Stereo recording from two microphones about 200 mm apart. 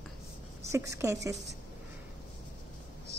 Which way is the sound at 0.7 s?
15° right (ahead or behind).